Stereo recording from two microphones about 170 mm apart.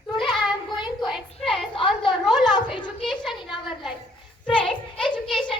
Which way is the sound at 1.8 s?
30° left (ahead or behind).